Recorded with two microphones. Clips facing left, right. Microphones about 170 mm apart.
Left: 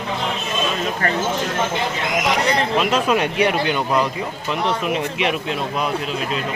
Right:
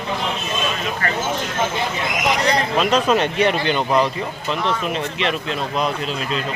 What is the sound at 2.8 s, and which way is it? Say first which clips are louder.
Speech: right 3 dB; 5° left (ahead or behind).